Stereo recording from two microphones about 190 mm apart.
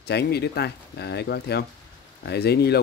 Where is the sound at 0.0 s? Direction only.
60° left (ahead or behind).